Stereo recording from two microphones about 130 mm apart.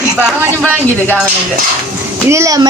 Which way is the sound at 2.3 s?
25° right (ahead or behind).